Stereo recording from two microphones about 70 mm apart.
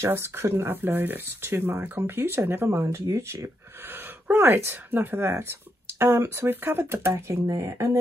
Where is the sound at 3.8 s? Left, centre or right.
Right.